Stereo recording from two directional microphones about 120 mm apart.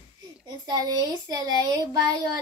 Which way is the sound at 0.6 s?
35° right (ahead or behind).